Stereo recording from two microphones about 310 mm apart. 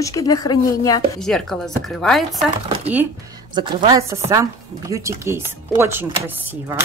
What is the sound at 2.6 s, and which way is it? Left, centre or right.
Speech, centre.